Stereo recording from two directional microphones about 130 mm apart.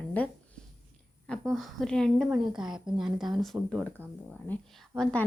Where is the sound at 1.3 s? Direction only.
5° left (ahead or behind).